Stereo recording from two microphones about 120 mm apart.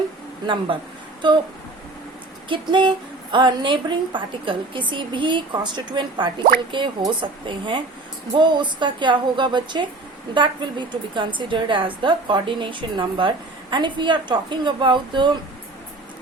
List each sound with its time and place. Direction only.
0.4 s speech: 45° right (ahead or behind)
2.5 s a woman's voice: 40° right (ahead or behind)